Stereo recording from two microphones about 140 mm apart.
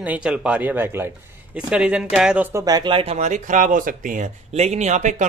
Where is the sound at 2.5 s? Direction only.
25° right (ahead or behind).